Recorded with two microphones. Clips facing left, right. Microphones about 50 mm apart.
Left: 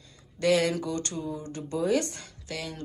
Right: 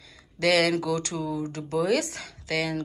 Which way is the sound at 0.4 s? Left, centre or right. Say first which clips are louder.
Right 2 dB; right.